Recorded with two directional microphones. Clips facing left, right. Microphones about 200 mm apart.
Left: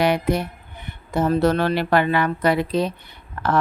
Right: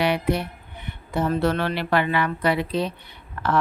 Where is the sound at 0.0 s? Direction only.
45° left (ahead or behind).